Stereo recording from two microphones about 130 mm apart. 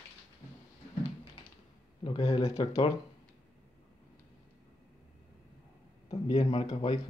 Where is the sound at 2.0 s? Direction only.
40° left (ahead or behind).